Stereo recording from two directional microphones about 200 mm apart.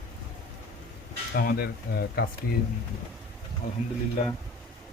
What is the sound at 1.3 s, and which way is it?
Speech, 50° left (ahead or behind).